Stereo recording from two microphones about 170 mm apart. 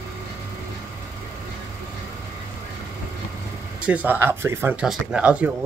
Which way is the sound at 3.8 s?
10° right (ahead or behind).